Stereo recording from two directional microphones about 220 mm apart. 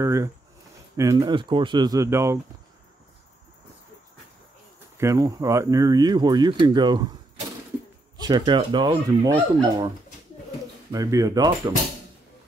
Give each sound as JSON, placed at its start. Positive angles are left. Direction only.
{"t": 0.0, "sound": "speech", "side_deg": -15}
{"t": 4.9, "sound": "speech", "side_deg": -15}
{"t": 8.2, "sound": "speech", "side_deg": -20}
{"t": 10.9, "sound": "speech", "side_deg": -15}